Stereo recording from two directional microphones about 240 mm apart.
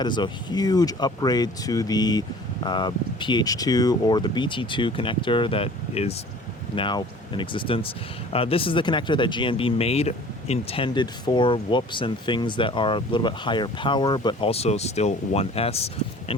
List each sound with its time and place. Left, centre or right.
0.0 s speech: centre